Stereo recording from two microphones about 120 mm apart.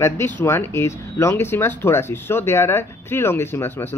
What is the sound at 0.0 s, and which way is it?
Speech, 20° left (ahead or behind).